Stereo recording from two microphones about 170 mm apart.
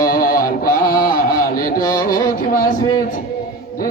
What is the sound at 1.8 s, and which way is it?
Carnatic music, 20° left (ahead or behind).